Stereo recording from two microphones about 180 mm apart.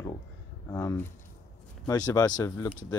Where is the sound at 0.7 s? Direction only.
20° left (ahead or behind).